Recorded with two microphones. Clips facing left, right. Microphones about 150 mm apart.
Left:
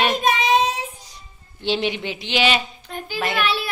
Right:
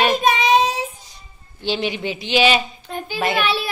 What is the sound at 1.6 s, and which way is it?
A woman's voice, 5° right (ahead or behind).